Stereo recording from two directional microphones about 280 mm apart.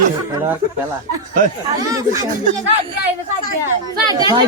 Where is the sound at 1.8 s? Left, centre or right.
Centre.